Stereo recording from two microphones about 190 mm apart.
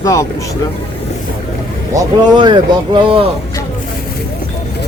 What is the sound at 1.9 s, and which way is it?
Speech, 20° right (ahead or behind).